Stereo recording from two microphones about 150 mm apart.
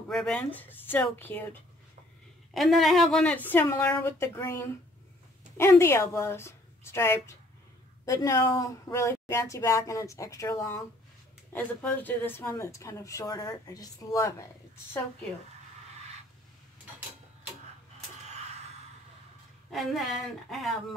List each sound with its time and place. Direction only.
0.1 s speech: 5° left (ahead or behind)
2.5 s speech: centre (ahead or behind); by 14.3 s 25° left (ahead or behind)
19.7 s a woman's voice: centre (ahead or behind)